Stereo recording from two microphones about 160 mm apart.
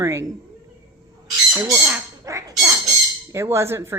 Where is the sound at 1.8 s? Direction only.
15° right (ahead or behind).